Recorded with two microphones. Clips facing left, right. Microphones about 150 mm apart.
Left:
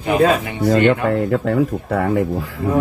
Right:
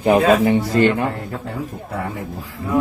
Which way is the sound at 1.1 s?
90° left.